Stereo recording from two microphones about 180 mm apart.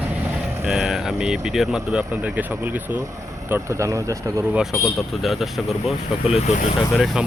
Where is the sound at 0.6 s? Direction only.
Centre (ahead or behind); by 4.5 s 15° right (ahead or behind).